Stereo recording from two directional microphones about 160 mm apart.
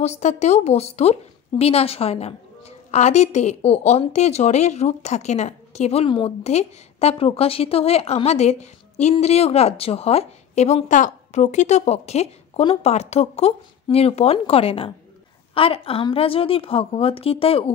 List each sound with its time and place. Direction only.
0.0 s a woman's voice: 45° left (ahead or behind)